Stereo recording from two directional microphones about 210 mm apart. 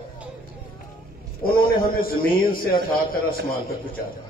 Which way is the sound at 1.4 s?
45° left (ahead or behind).